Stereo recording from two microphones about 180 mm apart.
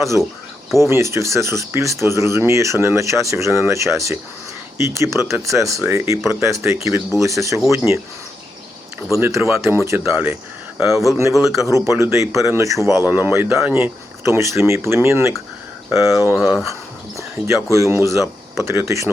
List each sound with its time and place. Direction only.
0.8 s speech: 15° right (ahead or behind)
9.1 s speech: 15° right (ahead or behind)
16.3 s speech: 5° right (ahead or behind)
17.2 s speech: 15° right (ahead or behind)